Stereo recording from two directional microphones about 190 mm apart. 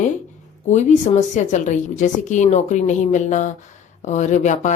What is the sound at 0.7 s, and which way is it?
A woman's voice, 35° left (ahead or behind).